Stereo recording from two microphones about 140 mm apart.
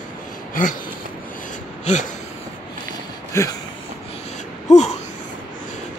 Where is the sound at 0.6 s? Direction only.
80° left.